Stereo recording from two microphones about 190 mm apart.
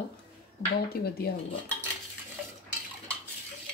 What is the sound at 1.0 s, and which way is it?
Speech, 55° left (ahead or behind).